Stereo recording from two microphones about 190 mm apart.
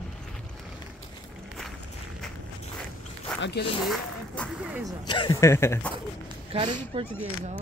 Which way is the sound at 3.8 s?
Centre (ahead or behind).